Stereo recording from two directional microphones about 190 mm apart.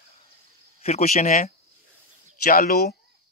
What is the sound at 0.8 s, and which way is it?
Speech, 35° left (ahead or behind).